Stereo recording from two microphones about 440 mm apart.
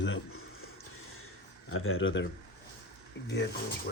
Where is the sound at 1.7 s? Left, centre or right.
Left.